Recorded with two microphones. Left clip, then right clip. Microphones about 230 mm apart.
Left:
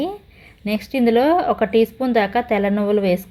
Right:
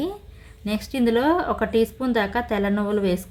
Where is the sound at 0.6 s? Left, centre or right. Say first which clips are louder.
Left 5 dB; centre.